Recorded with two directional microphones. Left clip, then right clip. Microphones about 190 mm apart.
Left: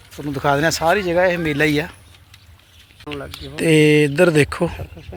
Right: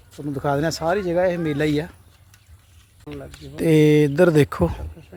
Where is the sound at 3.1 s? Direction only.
35° left (ahead or behind).